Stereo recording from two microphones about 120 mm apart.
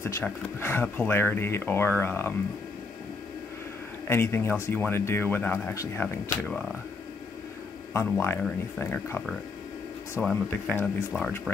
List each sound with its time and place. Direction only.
0.0 s speech: 20° left (ahead or behind)
4.1 s speech: 20° left (ahead or behind)
7.9 s speech: 20° left (ahead or behind)
10.2 s speech: 5° left (ahead or behind)
10.5 s speech: 15° left (ahead or behind)